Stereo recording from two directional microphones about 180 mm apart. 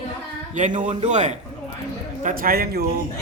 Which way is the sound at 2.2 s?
55° right (ahead or behind).